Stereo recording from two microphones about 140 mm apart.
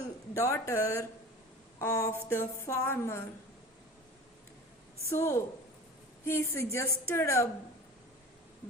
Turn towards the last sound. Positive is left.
turn(degrees=20)  # may be behind; listen again after turning